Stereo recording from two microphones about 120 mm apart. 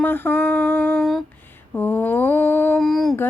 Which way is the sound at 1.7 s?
15° left (ahead or behind).